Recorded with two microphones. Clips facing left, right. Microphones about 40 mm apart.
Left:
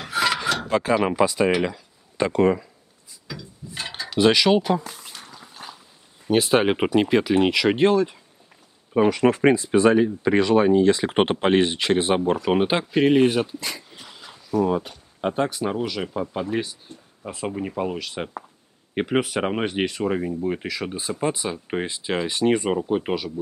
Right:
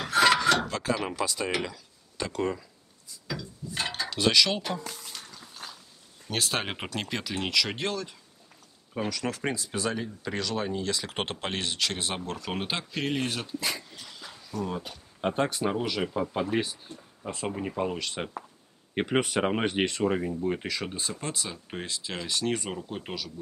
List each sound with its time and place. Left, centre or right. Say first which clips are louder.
0.0 s filing: right 1 dB; centre
0.7 s speech: left 9 dB; left
3.3 s a sound: right 1 dB; centre
4.1 s speech: left 8 dB; centre
4.7 s a sound: left 7 dB; centre
6.2 s speech: left 12 dB; centre
13.6 s speech: even; centre
13.8 s dog: left 2 dB; centre
14.3 s speech: left 12 dB; centre
15.1 s speech: left 4 dB; centre
21.2 s speech: left 10 dB; left